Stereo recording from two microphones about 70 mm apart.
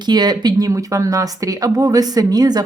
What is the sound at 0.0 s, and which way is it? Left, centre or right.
Speech, right.